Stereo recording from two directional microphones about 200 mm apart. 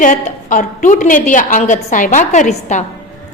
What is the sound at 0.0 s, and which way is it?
A woman's voice, 40° left (ahead or behind).